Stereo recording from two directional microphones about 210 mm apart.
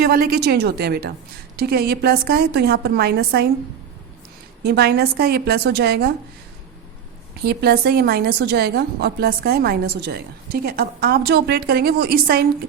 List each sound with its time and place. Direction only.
0.0 s a woman's voice: 45° right (ahead or behind)
4.6 s a woman's voice: 50° right (ahead or behind)
7.4 s a woman's voice: 50° right (ahead or behind)